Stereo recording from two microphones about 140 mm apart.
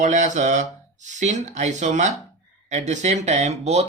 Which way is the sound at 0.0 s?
60° right (ahead or behind).